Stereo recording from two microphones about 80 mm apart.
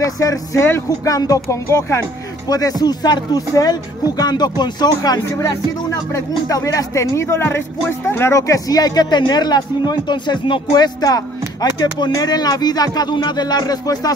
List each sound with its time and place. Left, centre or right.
0.0 s speech: left
2.4 s a man's voice: left
6.1 s speech: left
8.4 s a man's voice: left